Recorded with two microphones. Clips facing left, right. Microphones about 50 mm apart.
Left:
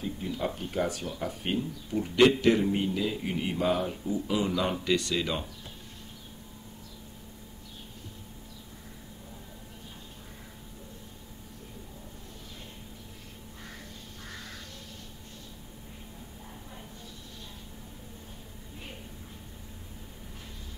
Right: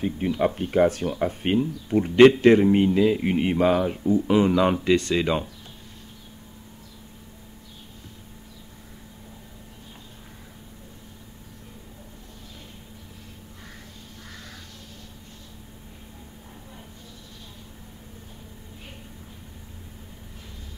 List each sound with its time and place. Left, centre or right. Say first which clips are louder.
0.0 s speech: right 9 dB; right